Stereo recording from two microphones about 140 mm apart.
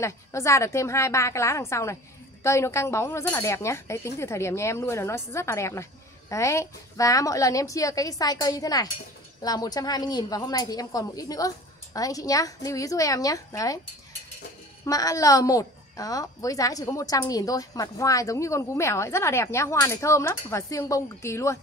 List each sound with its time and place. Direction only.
0.0 s a woman's voice: 20° left (ahead or behind)
14.9 s a woman's voice: 25° left (ahead or behind)